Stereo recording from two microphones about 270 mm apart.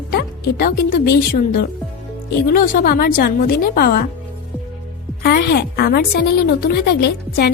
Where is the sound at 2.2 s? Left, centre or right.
Left.